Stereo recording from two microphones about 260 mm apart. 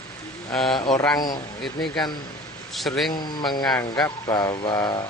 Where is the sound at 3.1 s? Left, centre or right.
Centre.